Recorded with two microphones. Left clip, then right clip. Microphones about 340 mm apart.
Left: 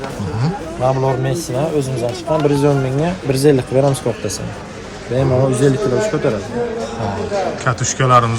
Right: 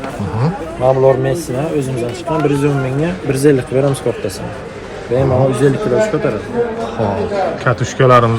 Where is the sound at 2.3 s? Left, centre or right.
Left.